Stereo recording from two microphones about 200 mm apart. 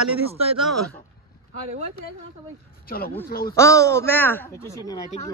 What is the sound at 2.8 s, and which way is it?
Speech, 45° left (ahead or behind).